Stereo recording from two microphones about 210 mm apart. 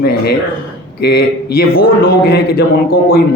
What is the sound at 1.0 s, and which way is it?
A man's voice, 50° left (ahead or behind).